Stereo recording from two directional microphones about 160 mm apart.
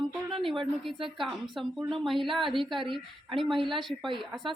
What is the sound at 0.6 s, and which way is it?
Speech, centre (ahead or behind).